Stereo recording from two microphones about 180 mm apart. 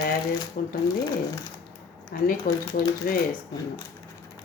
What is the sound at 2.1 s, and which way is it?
Speech, 55° left (ahead or behind).